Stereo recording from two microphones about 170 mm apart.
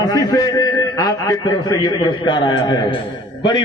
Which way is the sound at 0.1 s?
20° left (ahead or behind).